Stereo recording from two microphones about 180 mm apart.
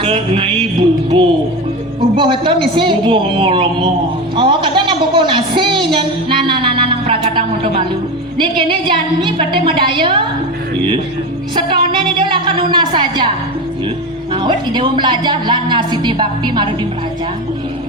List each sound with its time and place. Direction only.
0.0 s music: 30° right (ahead or behind)
1.1 s a woman's voice: 30° right (ahead or behind)
11.5 s a sound: 25° right (ahead or behind)
14.3 s a woman's voice: 25° right (ahead or behind)